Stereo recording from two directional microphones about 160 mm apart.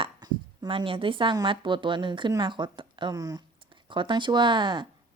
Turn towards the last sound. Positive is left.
turn(degrees=-30)  # may be behind; listen again after turning